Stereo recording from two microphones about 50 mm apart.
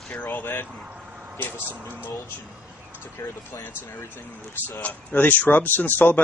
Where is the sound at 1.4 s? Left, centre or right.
Left.